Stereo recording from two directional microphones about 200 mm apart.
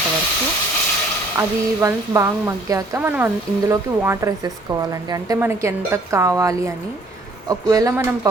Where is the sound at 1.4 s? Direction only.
15° right (ahead or behind).